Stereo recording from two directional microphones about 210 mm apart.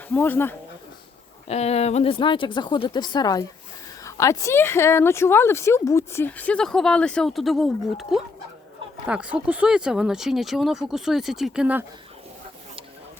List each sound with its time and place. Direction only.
0.1 s a woman's voice: 10° left (ahead or behind)
1.5 s a woman's voice: 30° left (ahead or behind); by 11.9 s 5° right (ahead or behind)